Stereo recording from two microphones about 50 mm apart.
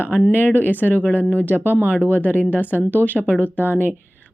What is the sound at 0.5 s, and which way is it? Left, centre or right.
Speech, left.